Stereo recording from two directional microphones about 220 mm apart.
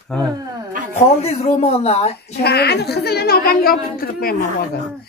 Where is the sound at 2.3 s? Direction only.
45° left (ahead or behind).